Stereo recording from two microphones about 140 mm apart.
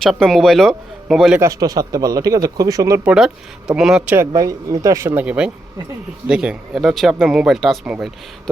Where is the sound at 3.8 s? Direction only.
5° right (ahead or behind).